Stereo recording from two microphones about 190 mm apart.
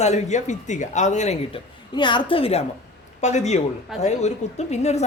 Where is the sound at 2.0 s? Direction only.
25° left (ahead or behind).